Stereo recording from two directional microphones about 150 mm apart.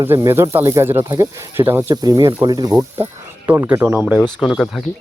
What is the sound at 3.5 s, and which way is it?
Speech, 10° right (ahead or behind).